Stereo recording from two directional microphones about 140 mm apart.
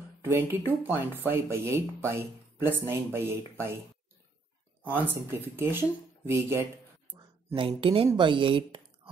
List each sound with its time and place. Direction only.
0.2 s speech: 15° right (ahead or behind)
5.6 s speech: 15° right (ahead or behind)
7.5 s speech: 40° right (ahead or behind)